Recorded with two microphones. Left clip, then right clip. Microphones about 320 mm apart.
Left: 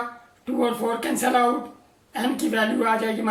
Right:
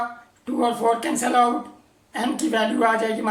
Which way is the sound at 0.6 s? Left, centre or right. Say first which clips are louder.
Right 4 dB; centre.